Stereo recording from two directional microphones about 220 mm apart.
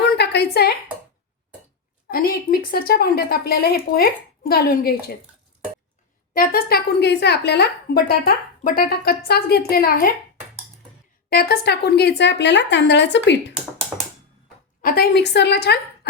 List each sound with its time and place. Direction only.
0.0 s a sound: 50° left (ahead or behind)
2.0 s a woman's voice: 40° left (ahead or behind)
6.3 s a woman's voice: 40° left (ahead or behind)
11.3 s a woman's voice: 45° left (ahead or behind)
14.8 s a woman's voice: 40° left (ahead or behind)